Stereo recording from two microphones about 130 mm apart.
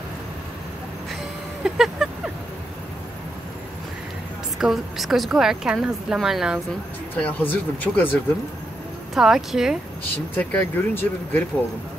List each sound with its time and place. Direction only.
1.6 s a sound: 5° right (ahead or behind)
4.6 s a woman's voice: centre (ahead or behind)
7.2 s speech: 10° left (ahead or behind)
9.1 s a woman's voice: 5° right (ahead or behind)
10.3 s speech: 15° left (ahead or behind)